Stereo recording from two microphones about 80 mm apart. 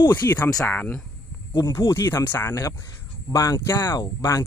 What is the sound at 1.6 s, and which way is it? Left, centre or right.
Speech, left.